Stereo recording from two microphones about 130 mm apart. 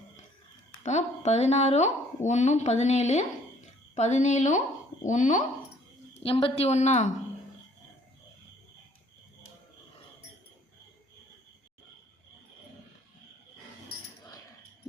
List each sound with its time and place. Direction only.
0.9 s speech: 60° left (ahead or behind)
6.1 s speech: 45° left (ahead or behind); by 7.1 s 65° left (ahead or behind)